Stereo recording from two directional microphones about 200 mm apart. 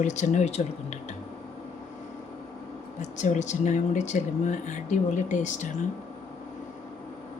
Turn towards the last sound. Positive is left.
turn(degrees=35)  # may be behind; listen again after turning